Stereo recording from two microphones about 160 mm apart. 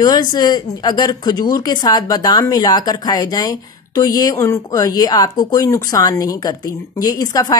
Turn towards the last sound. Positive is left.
turn(degrees=25)  # may be behind; listen again after turning